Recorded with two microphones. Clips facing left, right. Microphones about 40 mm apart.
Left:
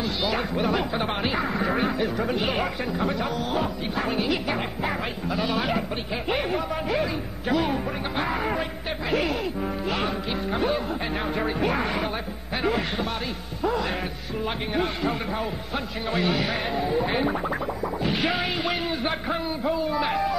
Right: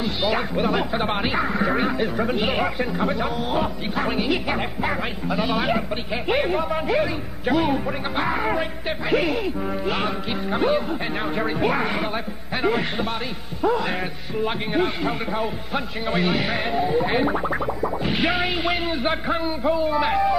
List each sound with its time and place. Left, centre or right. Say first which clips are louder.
0.0 s a man's voice: right 3 dB; centre